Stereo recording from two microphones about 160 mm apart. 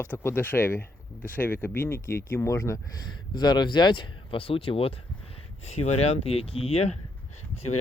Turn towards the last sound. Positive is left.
turn(degrees=40)  # may be behind; listen again after turning